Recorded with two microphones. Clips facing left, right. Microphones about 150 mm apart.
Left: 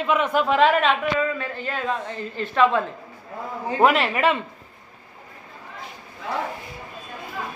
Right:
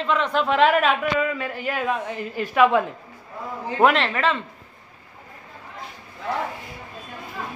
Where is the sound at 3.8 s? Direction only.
5° left (ahead or behind).